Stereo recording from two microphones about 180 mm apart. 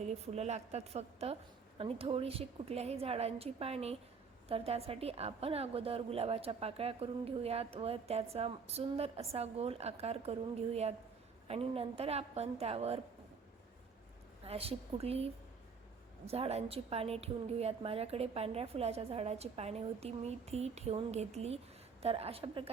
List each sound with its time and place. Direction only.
0.0 s a woman's voice: 35° right (ahead or behind)
14.4 s a woman's voice: 35° right (ahead or behind)